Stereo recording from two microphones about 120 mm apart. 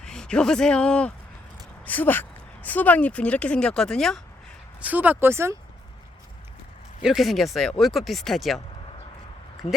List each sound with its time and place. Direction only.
0.0 s a man's voice: 5° left (ahead or behind)
4.8 s speech: 15° right (ahead or behind)
7.0 s speech: centre (ahead or behind)